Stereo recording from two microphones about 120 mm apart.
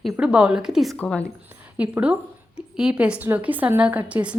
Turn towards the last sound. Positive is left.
turn(degrees=-10)  # may be behind; listen again after turning